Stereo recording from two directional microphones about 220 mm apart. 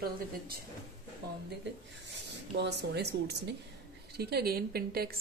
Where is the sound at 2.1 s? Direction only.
50° right (ahead or behind).